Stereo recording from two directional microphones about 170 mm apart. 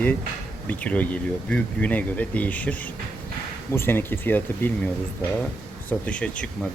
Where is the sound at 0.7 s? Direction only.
10° left (ahead or behind).